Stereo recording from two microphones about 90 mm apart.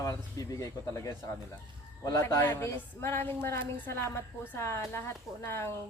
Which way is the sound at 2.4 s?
30° left (ahead or behind).